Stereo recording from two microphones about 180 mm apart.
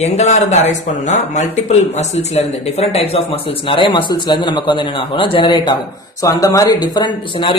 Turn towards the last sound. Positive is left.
turn(degrees=25)  # may be behind; listen again after turning